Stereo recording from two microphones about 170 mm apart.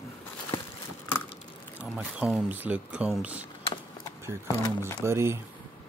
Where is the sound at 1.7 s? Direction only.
5° right (ahead or behind).